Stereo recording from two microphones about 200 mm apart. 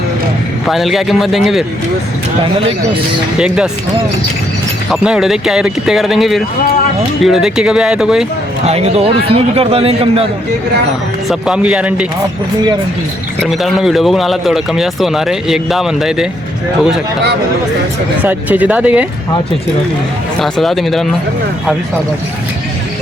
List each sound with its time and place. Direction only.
0.7 s speech: centre (ahead or behind)
3.3 s speech: 5° right (ahead or behind)
4.9 s speech: 5° right (ahead or behind)
8.6 s a man's voice: 30° right (ahead or behind)
11.3 s speech: 5° right (ahead or behind)
13.4 s speech: centre (ahead or behind)
18.2 s speech: 10° right (ahead or behind)
20.4 s speech: centre (ahead or behind)